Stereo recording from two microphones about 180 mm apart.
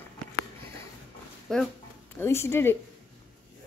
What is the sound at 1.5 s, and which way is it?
Speech, centre (ahead or behind).